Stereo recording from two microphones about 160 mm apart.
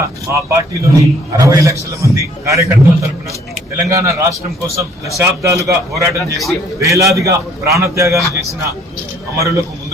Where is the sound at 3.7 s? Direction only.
20° right (ahead or behind).